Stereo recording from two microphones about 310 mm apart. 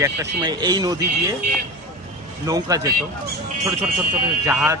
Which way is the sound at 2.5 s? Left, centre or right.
Centre.